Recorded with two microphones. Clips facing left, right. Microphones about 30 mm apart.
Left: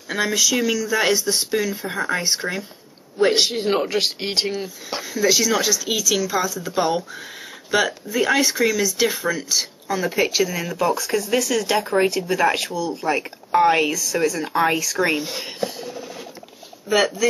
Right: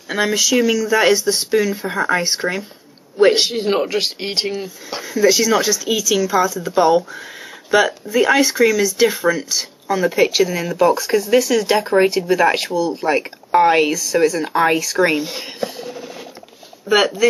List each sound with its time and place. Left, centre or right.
0.4 s speech: centre
13.9 s speech: centre